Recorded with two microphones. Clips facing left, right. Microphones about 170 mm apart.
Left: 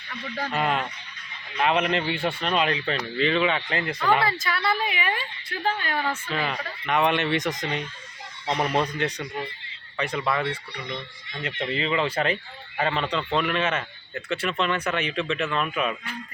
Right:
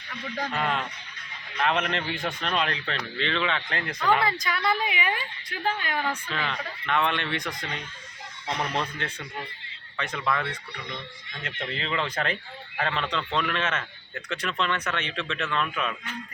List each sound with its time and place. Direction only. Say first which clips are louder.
0.5 s speech: left 5 dB; 5° left (ahead or behind)
4.3 s a woman's voice: left 1 dB; 15° right (ahead or behind)
6.0 s speech: left 2 dB; 5° left (ahead or behind)
10.0 s speech: left 3 dB; 10° left (ahead or behind)
11.4 s speech: left 6 dB; 5° left (ahead or behind)